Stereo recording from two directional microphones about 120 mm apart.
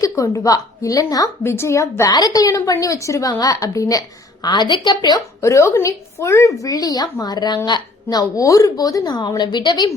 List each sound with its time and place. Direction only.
0.0 s a woman's voice: 30° left (ahead or behind)
4.4 s a woman's voice: 40° left (ahead or behind)
5.4 s a woman's voice: 25° left (ahead or behind)